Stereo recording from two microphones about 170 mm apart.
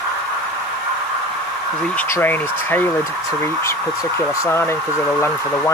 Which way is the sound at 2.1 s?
10° left (ahead or behind).